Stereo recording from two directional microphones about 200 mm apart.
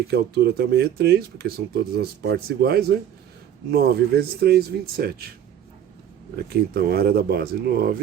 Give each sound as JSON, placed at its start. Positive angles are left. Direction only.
{"t": 0.1, "sound": "speech", "side_deg": -55}
{"t": 6.3, "sound": "speech", "side_deg": -50}